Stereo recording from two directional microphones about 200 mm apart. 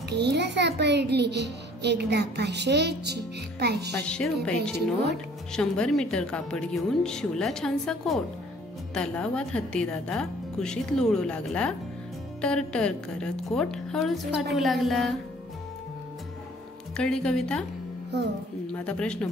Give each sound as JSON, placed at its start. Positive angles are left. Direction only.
{"t": 0.1, "sound": "a child's voice", "side_deg": -55}
{"t": 4.1, "sound": "speech", "side_deg": 5}
{"t": 16.9, "sound": "speech", "side_deg": 5}
{"t": 18.7, "sound": "speech", "side_deg": 5}